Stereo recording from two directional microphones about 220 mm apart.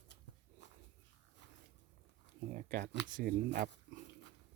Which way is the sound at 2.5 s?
35° right (ahead or behind).